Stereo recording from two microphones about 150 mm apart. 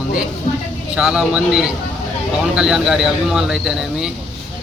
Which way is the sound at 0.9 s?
5° right (ahead or behind).